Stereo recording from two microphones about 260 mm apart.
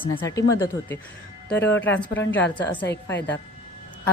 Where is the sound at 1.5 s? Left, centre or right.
Centre.